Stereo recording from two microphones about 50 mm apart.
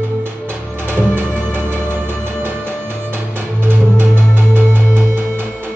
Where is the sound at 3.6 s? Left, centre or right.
Right.